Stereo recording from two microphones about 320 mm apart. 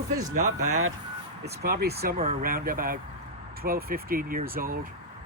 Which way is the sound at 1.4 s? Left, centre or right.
Right.